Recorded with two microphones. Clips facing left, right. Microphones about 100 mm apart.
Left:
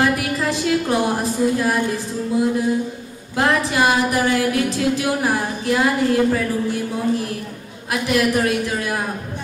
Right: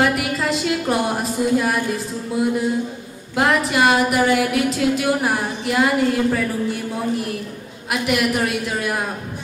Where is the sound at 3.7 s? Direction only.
20° right (ahead or behind).